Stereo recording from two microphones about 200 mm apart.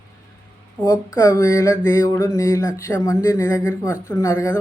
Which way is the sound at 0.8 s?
20° left (ahead or behind).